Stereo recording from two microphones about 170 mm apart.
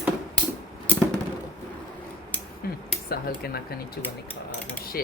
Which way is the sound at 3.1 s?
65° left (ahead or behind).